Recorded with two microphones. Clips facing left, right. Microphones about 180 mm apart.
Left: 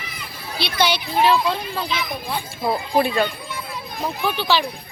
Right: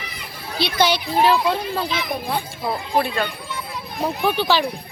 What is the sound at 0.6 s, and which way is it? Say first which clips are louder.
Speech: right 2 dB; 45° right (ahead or behind).